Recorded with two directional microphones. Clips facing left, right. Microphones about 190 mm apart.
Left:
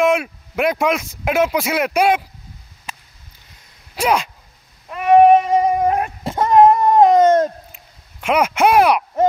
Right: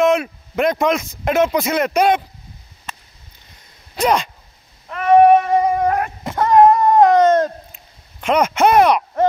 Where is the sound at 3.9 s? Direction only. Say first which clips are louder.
Right 1 dB; 5° left (ahead or behind).